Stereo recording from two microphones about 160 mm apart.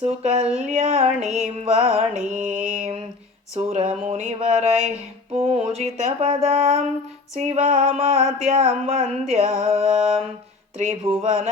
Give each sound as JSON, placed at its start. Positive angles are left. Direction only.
{"t": 0.0, "sound": "music", "side_deg": -45}